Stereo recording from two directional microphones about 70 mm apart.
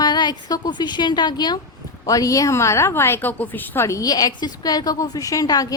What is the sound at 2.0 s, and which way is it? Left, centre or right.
A woman's voice, left.